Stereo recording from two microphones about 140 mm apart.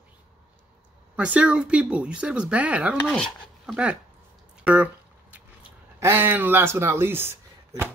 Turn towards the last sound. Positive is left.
turn(degrees=-15)  # may be behind; listen again after turning